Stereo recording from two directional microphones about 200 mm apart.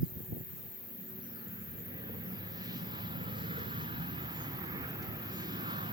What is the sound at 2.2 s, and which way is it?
Vehicle, 20° right (ahead or behind).